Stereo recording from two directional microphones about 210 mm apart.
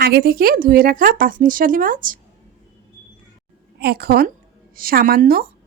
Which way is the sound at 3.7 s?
45° right (ahead or behind).